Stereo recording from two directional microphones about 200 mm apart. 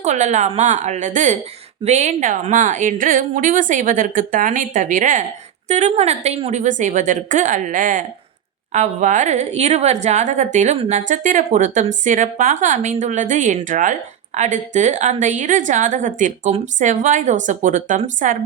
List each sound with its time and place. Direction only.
0.0 s a woman's voice: 35° right (ahead or behind)